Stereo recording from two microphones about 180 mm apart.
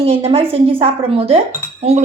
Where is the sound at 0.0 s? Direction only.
35° right (ahead or behind).